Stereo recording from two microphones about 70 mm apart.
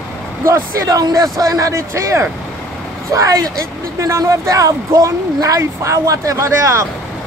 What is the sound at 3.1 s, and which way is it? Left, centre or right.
A man's voice, right.